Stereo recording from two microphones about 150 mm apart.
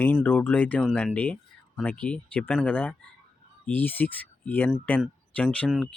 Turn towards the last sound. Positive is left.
turn(degrees=5)  # may be behind; listen again after turning